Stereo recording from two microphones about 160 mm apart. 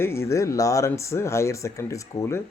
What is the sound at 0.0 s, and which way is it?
Speech, 15° left (ahead or behind).